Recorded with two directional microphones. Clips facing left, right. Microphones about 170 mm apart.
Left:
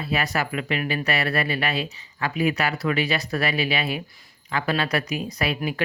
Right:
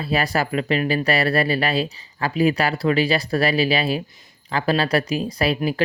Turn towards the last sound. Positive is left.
turn(degrees=-35)  # may be behind; listen again after turning